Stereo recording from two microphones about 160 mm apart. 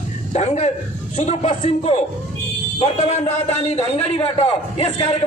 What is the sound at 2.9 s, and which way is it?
A man's voice, 45° left (ahead or behind).